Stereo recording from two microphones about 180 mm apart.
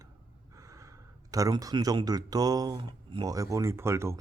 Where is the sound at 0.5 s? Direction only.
15° right (ahead or behind).